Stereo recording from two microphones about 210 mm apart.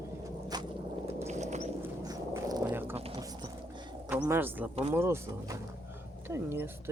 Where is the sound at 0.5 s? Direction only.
20° right (ahead or behind).